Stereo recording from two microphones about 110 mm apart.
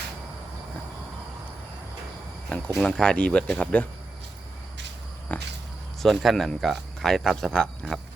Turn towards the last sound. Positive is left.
turn(degrees=5)  # may be behind; listen again after turning